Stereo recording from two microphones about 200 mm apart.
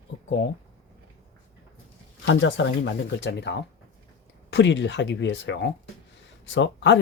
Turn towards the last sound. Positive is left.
turn(degrees=65)  # may be behind; listen again after turning